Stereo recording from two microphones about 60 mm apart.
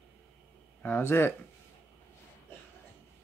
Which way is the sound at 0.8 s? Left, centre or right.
Left.